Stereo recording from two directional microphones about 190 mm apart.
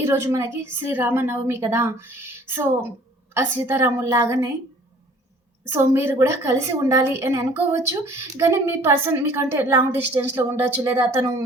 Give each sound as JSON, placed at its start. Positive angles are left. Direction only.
{"t": 0.0, "sound": "a woman's voice", "side_deg": -15}
{"t": 5.6, "sound": "a woman's voice", "side_deg": -10}